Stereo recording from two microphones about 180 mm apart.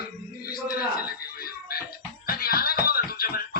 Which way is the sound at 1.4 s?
55° left (ahead or behind).